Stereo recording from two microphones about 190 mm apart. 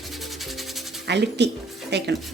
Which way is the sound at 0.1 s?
Centre (ahead or behind).